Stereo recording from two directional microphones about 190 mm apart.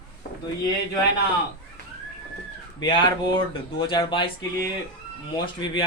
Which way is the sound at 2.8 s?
25° left (ahead or behind).